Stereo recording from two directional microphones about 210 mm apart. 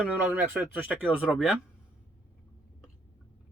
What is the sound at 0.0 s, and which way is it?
Speech, 10° right (ahead or behind).